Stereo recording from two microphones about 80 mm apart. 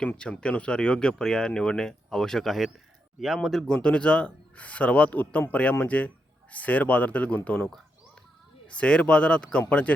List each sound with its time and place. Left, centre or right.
0.2 s speech: centre
3.8 s speech: centre
8.7 s speech: centre